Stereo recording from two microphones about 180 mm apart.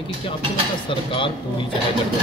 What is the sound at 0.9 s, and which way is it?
Speech, 30° left (ahead or behind).